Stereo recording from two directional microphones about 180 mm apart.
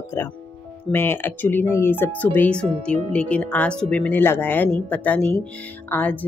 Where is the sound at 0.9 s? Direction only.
10° left (ahead or behind).